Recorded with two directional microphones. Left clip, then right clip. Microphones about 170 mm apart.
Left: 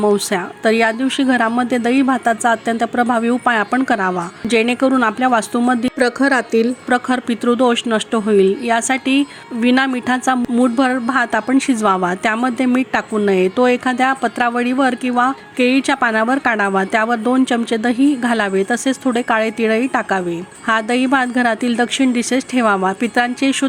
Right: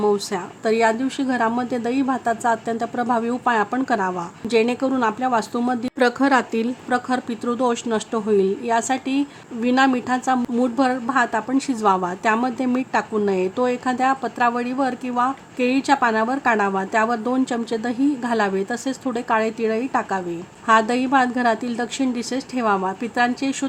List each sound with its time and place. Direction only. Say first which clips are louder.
0.1 s a woman's voice: left 5 dB; 20° left (ahead or behind)